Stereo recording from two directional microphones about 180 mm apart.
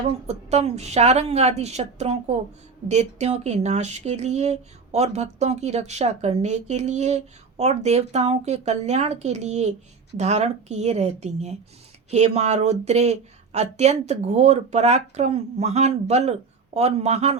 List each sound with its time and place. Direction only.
0.3 s speech: 35° right (ahead or behind)